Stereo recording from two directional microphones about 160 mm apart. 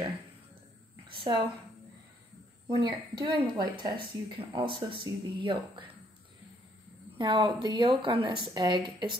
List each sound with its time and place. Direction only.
1.0 s a sound: 30° right (ahead or behind)
2.7 s speech: 30° right (ahead or behind)
7.2 s speech: 30° right (ahead or behind)